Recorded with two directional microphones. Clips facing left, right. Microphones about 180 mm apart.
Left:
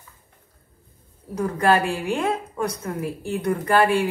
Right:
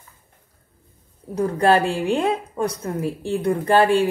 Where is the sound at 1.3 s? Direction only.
30° right (ahead or behind).